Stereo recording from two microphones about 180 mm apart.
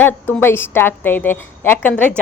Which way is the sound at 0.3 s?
10° left (ahead or behind).